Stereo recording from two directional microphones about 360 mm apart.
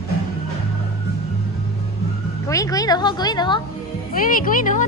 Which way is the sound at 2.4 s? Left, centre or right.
Centre.